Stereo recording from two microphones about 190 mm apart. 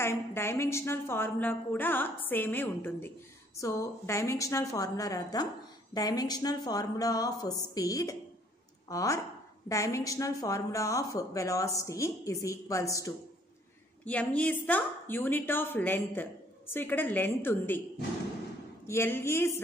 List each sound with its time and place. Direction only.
0.0 s a woman's voice: 15° left (ahead or behind)
18.9 s a woman's voice: 10° left (ahead or behind)